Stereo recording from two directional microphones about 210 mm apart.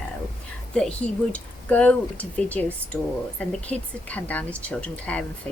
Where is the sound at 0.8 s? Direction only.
5° left (ahead or behind).